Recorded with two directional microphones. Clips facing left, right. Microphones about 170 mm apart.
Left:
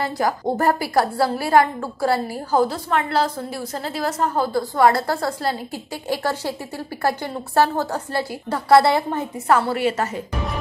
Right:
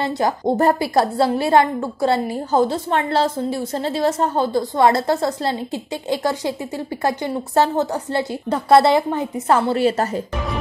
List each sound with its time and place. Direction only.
0.0 s a woman's voice: 25° right (ahead or behind)